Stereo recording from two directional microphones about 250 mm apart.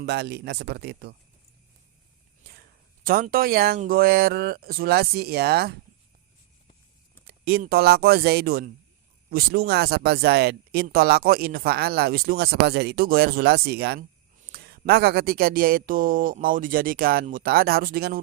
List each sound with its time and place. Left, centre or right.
0.0 s speech: right
2.5 s speech: right
7.3 s speech: right